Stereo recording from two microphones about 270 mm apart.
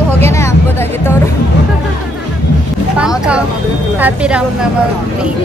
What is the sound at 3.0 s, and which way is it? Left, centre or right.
Speech, centre.